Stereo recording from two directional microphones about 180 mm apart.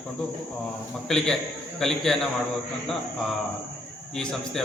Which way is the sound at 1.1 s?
5° left (ahead or behind).